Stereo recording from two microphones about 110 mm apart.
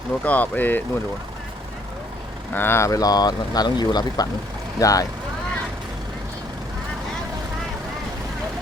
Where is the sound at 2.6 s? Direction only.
20° left (ahead or behind).